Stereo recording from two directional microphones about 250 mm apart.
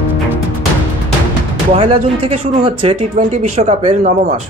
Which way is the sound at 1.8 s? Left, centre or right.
Right.